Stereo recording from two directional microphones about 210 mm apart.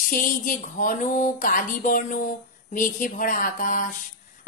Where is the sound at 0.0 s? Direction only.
40° left (ahead or behind).